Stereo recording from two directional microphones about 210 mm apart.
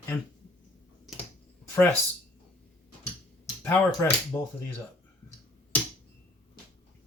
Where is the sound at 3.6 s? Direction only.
10° left (ahead or behind).